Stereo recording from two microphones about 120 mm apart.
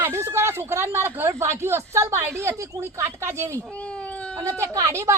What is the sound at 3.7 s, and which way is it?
Baby cry, 10° left (ahead or behind).